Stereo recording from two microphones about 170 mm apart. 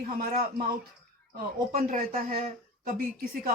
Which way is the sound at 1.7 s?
50° right (ahead or behind).